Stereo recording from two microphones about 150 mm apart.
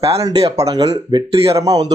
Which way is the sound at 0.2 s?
25° right (ahead or behind).